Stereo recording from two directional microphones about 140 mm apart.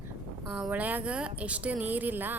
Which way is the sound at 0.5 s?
10° right (ahead or behind).